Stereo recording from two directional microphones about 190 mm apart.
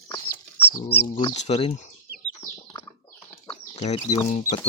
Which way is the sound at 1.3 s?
35° left (ahead or behind).